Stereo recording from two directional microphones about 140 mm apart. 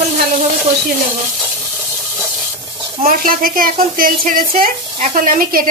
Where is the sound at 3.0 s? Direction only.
85° right.